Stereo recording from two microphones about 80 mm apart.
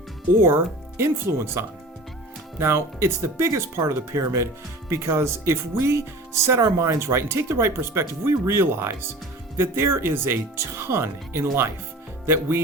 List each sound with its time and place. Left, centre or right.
0.4 s speech: right